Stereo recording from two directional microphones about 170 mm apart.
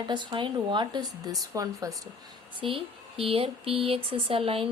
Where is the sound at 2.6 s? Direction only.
30° right (ahead or behind).